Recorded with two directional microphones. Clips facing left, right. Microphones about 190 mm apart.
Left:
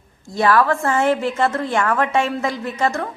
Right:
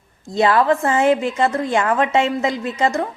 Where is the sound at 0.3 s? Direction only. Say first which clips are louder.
Right 1 dB; 20° right (ahead or behind).